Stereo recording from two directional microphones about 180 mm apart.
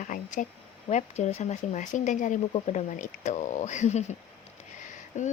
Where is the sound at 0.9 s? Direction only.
40° left (ahead or behind).